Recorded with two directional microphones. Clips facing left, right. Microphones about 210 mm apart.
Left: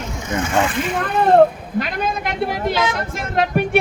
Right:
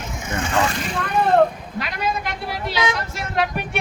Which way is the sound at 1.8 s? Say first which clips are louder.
Left 4 dB; 45° left (ahead or behind).